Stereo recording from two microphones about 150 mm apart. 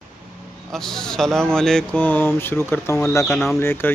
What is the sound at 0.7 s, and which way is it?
Speech, 5° left (ahead or behind).